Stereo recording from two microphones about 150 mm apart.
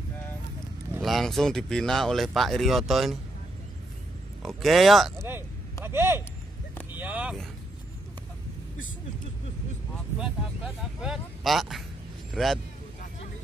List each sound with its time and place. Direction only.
1.0 s speech: centre (ahead or behind)
4.4 s speech: centre (ahead or behind)
5.9 s speech: 15° right (ahead or behind)
10.1 s speech: 5° right (ahead or behind)